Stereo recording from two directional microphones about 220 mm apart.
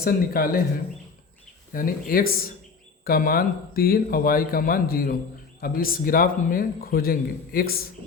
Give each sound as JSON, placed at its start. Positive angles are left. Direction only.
{"t": 0.0, "sound": "speech", "side_deg": 40}
{"t": 1.7, "sound": "a man's voice", "side_deg": 40}